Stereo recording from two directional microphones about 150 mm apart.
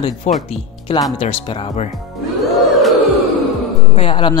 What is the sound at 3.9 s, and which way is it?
Speech, 35° left (ahead or behind).